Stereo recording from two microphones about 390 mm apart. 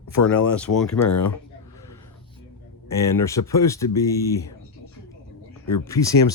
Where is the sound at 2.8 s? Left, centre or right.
Centre.